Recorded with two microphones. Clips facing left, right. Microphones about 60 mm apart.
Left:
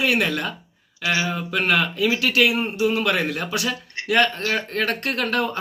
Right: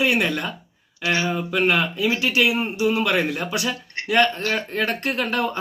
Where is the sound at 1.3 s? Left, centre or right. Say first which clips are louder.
Right 1 dB; centre.